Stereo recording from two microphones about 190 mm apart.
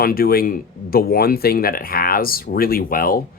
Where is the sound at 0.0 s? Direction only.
50° left (ahead or behind).